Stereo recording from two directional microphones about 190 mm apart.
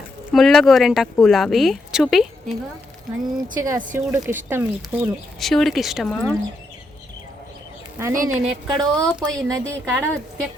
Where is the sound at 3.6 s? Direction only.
15° right (ahead or behind).